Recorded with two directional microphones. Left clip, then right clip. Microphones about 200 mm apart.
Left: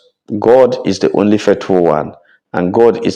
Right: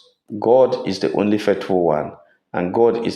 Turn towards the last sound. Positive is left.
turn(degrees=40)  # may be behind; listen again after turning